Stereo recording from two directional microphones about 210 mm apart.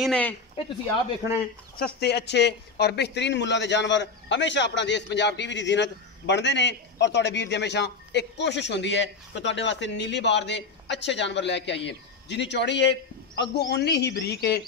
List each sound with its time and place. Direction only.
0.0 s speech: 5° left (ahead or behind)
1.2 s speech: 15° right (ahead or behind)
1.8 s a man's voice: 50° left (ahead or behind)